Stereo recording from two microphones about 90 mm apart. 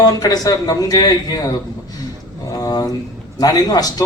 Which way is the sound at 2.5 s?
45° left (ahead or behind).